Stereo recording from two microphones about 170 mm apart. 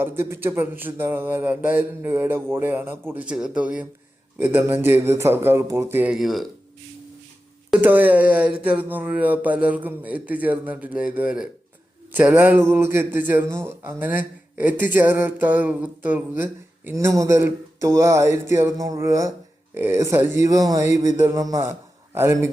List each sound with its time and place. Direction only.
0.0 s speech: 15° right (ahead or behind)
7.7 s speech: 10° right (ahead or behind)